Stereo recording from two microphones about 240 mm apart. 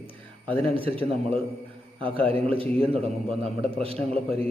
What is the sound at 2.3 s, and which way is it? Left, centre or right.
A man's voice, right.